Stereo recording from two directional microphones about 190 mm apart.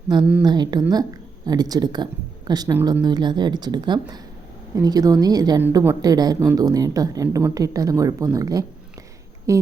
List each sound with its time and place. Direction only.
0.4 s speech: 20° right (ahead or behind)